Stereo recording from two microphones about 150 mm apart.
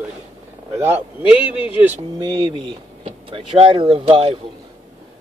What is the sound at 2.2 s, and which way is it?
Speech, 30° right (ahead or behind).